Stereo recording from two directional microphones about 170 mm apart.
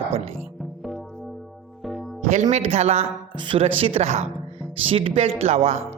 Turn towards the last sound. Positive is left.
turn(degrees=-40)  # may be behind; listen again after turning